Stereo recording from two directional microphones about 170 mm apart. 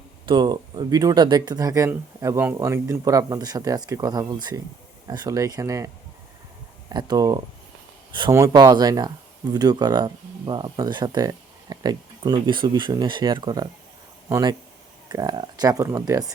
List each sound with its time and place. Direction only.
0.3 s speech: 25° right (ahead or behind)
6.9 s speech: 20° right (ahead or behind)